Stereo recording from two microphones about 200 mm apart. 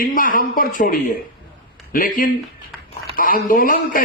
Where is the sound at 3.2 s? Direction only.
45° left (ahead or behind).